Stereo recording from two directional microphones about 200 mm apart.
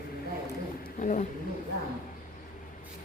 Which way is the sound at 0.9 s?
40° left (ahead or behind).